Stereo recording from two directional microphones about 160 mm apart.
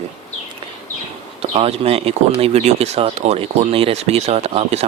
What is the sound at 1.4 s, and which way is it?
Speech, 40° right (ahead or behind).